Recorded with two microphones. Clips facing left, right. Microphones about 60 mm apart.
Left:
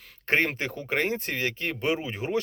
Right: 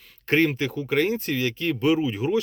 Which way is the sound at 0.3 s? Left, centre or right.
Left.